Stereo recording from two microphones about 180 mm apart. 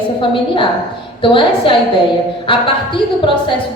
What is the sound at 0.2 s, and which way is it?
A woman's voice, 30° left (ahead or behind).